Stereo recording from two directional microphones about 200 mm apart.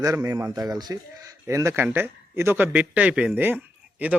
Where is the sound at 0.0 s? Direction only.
15° right (ahead or behind).